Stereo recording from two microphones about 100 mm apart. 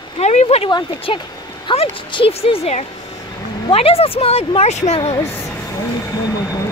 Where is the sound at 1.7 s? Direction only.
60° left (ahead or behind).